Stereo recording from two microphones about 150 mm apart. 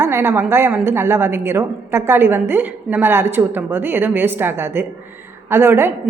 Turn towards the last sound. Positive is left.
turn(degrees=-15)  # may be behind; listen again after turning